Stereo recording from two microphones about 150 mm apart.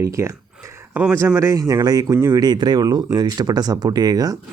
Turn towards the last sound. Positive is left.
turn(degrees=-25)  # may be behind; listen again after turning